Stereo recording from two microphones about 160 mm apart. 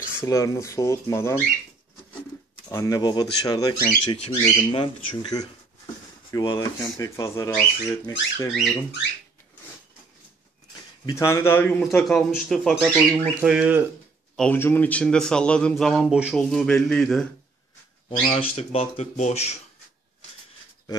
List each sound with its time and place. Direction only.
0.2 s speech: 20° left (ahead or behind)
2.7 s speech: 20° left (ahead or behind)
4.2 s speech: 35° left (ahead or behind)
7.0 s speech: 20° left (ahead or behind)
11.1 s speech: 20° left (ahead or behind)
11.8 s a man's voice: 5° left (ahead or behind)
13.4 s speech: 5° right (ahead or behind)
14.3 s a man's voice: 10° left (ahead or behind)
18.1 s speech: 40° left (ahead or behind)